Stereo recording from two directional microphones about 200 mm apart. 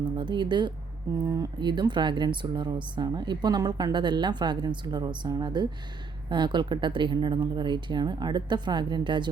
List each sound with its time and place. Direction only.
0.0 s speech: 25° right (ahead or behind)